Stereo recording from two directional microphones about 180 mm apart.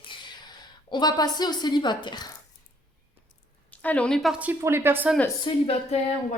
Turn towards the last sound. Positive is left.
turn(degrees=35)  # may be behind; listen again after turning